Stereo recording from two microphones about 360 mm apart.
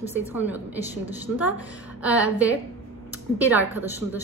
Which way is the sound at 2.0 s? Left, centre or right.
Centre.